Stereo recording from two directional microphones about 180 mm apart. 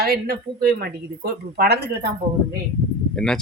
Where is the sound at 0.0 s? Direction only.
60° right (ahead or behind).